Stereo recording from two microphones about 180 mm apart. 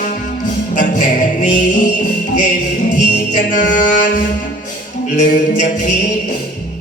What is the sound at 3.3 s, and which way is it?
Music, 45° left (ahead or behind).